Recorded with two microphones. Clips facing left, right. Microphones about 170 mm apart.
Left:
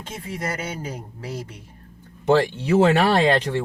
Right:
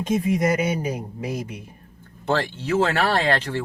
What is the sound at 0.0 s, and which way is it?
Speech, 15° right (ahead or behind).